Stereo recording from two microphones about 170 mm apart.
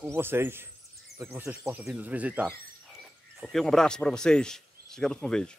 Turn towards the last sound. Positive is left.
turn(degrees=5)  # may be behind; listen again after turning